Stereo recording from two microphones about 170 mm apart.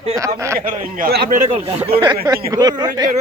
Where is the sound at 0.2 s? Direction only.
15° right (ahead or behind).